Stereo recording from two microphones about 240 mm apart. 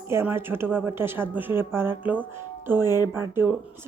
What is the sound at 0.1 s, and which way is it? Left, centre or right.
Speech, centre.